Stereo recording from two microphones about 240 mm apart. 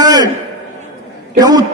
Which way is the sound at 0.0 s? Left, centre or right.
Centre.